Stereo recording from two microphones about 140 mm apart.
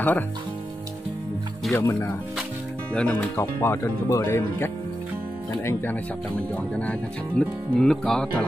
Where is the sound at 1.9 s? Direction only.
20° left (ahead or behind).